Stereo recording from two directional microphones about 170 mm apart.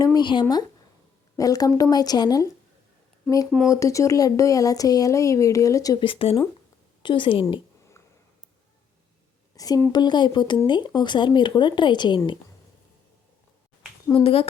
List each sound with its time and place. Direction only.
0.0 s speech: 25° left (ahead or behind)
3.7 s a woman's voice: 20° left (ahead or behind)
9.6 s speech: 20° left (ahead or behind)
14.1 s a woman's voice: 30° left (ahead or behind)